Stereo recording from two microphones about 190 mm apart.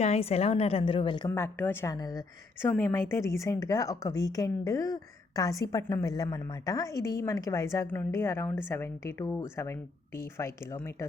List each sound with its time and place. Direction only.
0.0 s a woman's voice: 35° left (ahead or behind)
1.3 s a woman's voice: 10° left (ahead or behind)